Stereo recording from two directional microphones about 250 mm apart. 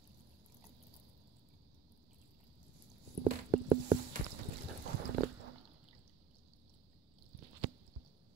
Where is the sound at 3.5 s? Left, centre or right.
Centre.